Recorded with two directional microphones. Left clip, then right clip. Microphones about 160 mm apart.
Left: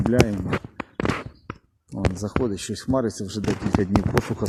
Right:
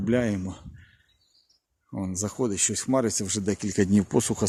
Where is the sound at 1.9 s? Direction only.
5° right (ahead or behind).